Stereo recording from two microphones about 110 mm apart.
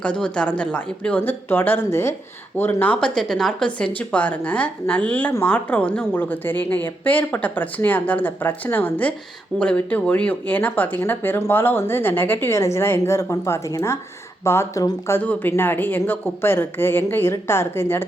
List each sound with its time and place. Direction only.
0.0 s a woman's voice: 10° left (ahead or behind)